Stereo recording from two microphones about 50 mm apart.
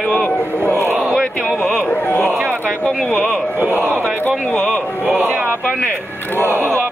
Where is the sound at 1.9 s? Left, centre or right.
Left.